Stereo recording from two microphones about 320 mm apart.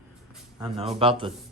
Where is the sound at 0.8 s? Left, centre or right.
Centre.